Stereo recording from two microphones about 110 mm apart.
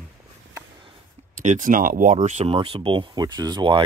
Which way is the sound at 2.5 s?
50° right (ahead or behind).